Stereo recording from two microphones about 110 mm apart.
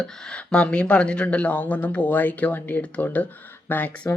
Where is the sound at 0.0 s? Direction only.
5° left (ahead or behind).